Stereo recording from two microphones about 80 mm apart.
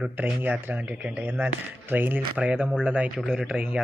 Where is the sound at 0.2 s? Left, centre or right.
Right.